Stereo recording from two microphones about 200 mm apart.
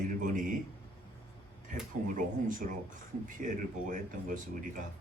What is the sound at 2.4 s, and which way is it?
A man's voice, 40° right (ahead or behind).